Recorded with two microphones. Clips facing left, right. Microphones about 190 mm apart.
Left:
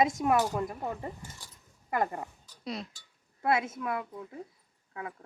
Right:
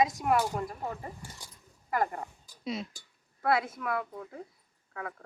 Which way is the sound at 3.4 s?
20° left (ahead or behind).